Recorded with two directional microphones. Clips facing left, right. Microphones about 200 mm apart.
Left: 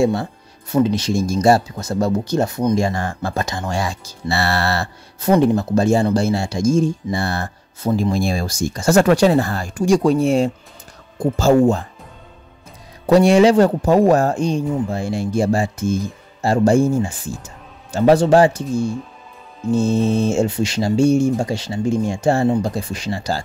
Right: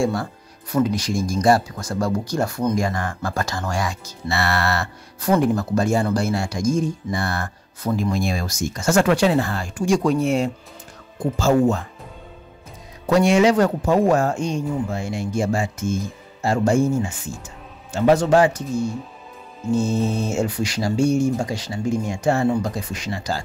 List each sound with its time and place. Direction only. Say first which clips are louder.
0.0 s speech: left 4 dB; 25° left (ahead or behind)
11.5 s speech: left 4 dB; 30° left (ahead or behind)
13.0 s speech: left 4 dB; 35° left (ahead or behind)